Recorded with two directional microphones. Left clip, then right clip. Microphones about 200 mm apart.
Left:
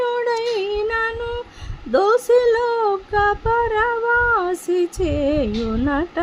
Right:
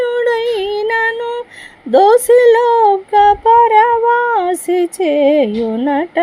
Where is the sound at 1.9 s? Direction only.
20° right (ahead or behind).